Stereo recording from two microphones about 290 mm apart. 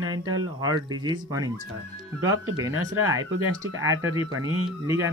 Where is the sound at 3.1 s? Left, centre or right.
Right.